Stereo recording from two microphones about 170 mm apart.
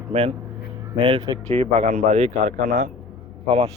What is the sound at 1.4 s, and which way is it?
Speech, 40° right (ahead or behind).